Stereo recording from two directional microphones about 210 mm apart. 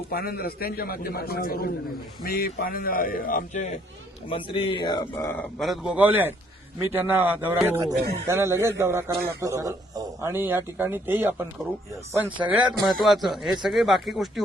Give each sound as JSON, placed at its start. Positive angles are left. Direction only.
{"t": 0.1, "sound": "a man's voice", "side_deg": 45}
{"t": 4.3, "sound": "a man's voice", "side_deg": 25}
{"t": 12.5, "sound": "a man's voice", "side_deg": -5}